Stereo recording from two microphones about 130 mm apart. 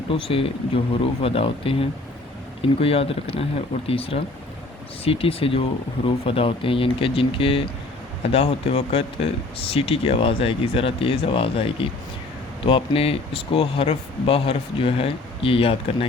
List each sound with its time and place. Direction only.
0.3 s speech: 45° left (ahead or behind)